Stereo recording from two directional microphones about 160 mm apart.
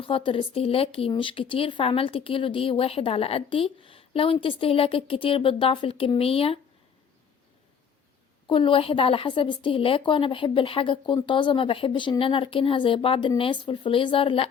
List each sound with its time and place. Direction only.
0.0 s speech: 35° left (ahead or behind)
8.4 s speech: 30° left (ahead or behind)